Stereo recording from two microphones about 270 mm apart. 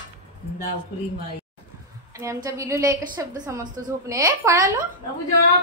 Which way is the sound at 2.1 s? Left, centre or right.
Centre.